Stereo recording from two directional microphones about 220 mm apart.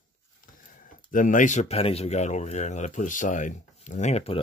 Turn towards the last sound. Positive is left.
turn(degrees=30)  # may be behind; listen again after turning